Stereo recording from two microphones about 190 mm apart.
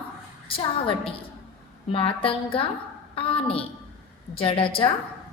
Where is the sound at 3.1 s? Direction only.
30° left (ahead or behind).